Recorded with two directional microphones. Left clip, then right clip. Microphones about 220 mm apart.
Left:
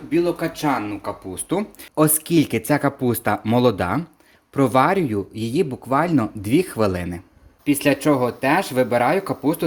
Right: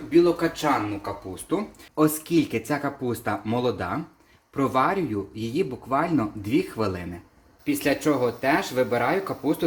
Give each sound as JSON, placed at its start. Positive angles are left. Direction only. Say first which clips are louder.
{"t": 0.1, "sound": "speech", "louder": "right 1 dB", "side_deg": 50}